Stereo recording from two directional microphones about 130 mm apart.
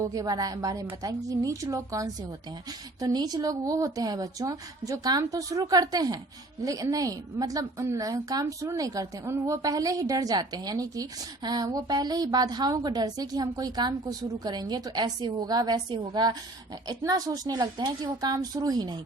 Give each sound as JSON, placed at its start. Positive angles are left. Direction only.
{"t": 0.0, "sound": "a woman's voice", "side_deg": -25}